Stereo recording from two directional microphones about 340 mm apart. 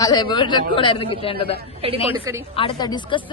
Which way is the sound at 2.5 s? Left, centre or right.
Centre.